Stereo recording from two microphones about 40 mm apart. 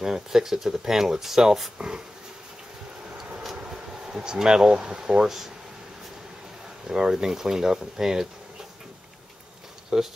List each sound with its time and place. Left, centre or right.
0.0 s speech: centre
3.5 s speech: centre
6.9 s speech: centre
9.9 s speech: centre